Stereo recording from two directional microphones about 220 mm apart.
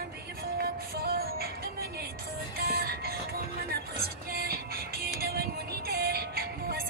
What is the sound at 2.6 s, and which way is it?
Music, 45° right (ahead or behind).